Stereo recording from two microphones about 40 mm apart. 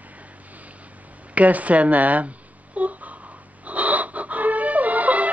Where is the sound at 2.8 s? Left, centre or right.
Right.